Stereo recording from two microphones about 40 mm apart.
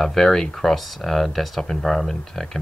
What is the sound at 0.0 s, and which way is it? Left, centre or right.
Speech, centre.